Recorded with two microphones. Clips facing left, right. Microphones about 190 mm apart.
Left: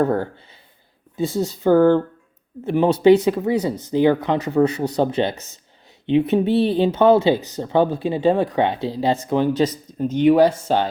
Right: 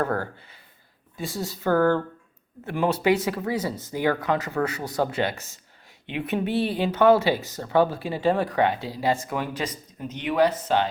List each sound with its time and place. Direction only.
0.0 s speech: 20° left (ahead or behind)